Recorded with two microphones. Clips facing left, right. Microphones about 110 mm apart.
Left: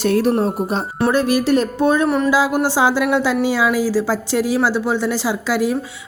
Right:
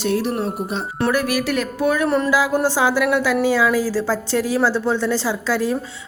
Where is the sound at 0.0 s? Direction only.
45° left (ahead or behind).